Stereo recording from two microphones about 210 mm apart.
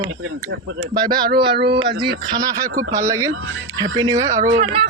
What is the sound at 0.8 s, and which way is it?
Speech, 20° right (ahead or behind).